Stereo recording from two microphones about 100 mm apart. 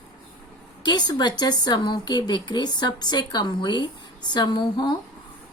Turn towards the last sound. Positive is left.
turn(degrees=50)  # may be behind; listen again after turning